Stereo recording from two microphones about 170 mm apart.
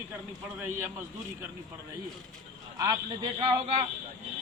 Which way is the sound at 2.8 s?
20° right (ahead or behind).